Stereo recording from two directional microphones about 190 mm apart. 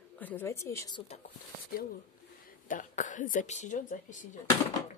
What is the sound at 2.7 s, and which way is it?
Speech, 45° left (ahead or behind).